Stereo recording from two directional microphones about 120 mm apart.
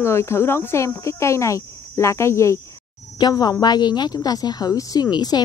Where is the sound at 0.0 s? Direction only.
20° left (ahead or behind).